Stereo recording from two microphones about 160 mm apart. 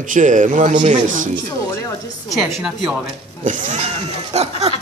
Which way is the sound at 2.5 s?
5° right (ahead or behind).